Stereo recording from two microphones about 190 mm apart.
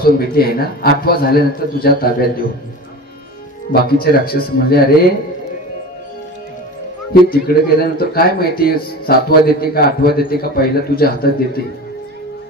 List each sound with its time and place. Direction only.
0.0 s speech: 55° left (ahead or behind)
3.7 s speech: 55° left (ahead or behind)
7.2 s speech: 55° left (ahead or behind)